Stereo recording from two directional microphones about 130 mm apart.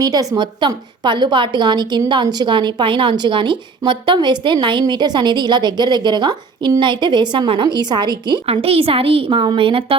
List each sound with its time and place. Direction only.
0.0 s a woman's voice: 30° right (ahead or behind)